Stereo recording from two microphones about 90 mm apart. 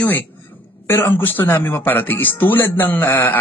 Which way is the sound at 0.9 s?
25° left (ahead or behind).